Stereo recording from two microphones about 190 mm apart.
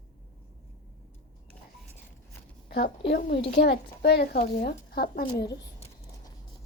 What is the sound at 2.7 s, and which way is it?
Speech, 60° left (ahead or behind).